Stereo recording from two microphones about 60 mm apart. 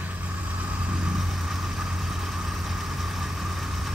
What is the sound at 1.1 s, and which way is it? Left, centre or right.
Vehicle, centre.